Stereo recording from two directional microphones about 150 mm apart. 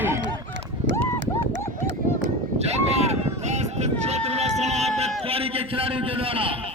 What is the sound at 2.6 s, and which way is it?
Run, 45° right (ahead or behind).